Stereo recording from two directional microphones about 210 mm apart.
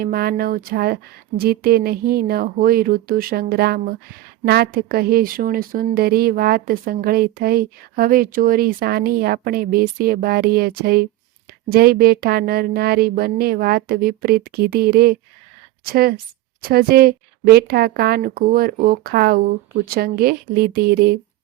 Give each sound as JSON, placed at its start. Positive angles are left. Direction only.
{"t": 0.0, "sound": "speech", "side_deg": -45}